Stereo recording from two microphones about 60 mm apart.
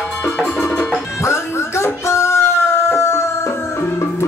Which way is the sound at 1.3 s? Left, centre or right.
Left.